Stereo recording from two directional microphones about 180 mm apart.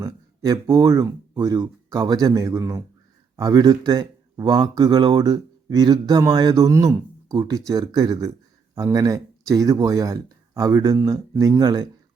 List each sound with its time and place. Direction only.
0.0 s speech: 20° right (ahead or behind)